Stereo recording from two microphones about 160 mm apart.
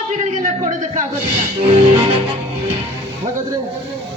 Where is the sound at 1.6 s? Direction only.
35° right (ahead or behind).